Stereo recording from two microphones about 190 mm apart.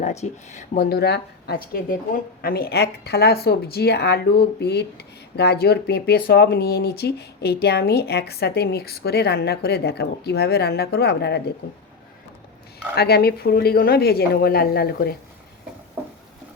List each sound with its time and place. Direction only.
0.0 s speech: 35° left (ahead or behind)
0.9 s a woman's voice: 60° left (ahead or behind)
13.0 s a woman's voice: 55° left (ahead or behind)